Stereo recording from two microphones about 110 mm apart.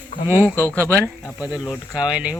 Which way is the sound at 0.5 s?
20° left (ahead or behind).